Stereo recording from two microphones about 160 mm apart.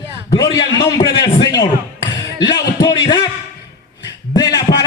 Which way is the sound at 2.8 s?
25° left (ahead or behind).